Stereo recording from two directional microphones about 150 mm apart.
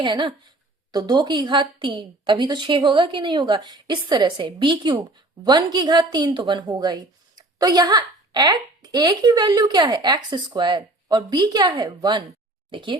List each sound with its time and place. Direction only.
0.0 s a woman's voice: 30° right (ahead or behind)